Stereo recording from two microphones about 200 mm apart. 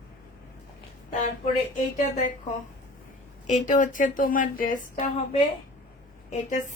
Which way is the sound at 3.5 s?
40° left (ahead or behind).